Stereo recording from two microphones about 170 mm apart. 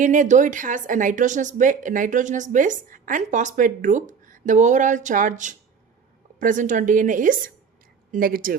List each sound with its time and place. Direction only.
0.0 s a woman's voice: 50° right (ahead or behind)